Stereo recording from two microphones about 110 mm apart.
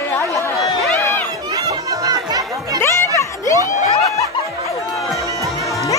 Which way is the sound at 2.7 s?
25° left (ahead or behind).